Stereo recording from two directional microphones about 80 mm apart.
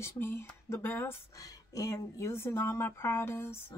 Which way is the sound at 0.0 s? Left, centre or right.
Left.